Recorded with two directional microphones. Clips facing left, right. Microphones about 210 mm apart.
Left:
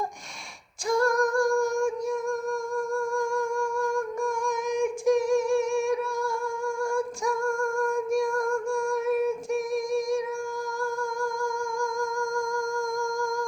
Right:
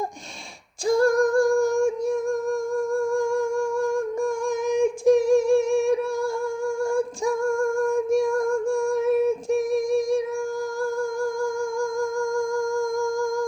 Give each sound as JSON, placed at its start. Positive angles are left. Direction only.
{"t": 0.9, "sound": "female singing", "side_deg": -30}
{"t": 3.2, "sound": "humming", "side_deg": -25}
{"t": 6.9, "sound": "female singing", "side_deg": -25}